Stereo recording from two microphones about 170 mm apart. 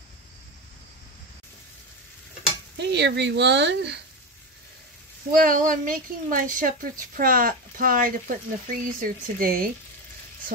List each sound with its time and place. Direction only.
2.8 s speech: 90° right
5.3 s a woman's voice: 55° right (ahead or behind)